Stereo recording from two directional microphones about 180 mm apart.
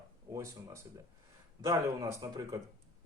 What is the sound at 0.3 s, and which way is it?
Speech, 15° right (ahead or behind).